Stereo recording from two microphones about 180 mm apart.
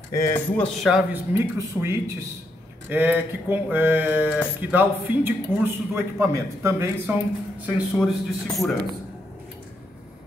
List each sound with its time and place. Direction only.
0.1 s speech: 15° left (ahead or behind)
0.7 s a man's voice: 5° right (ahead or behind)
7.6 s speech: centre (ahead or behind)